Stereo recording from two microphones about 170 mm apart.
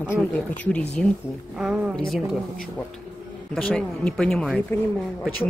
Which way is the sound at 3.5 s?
5° left (ahead or behind).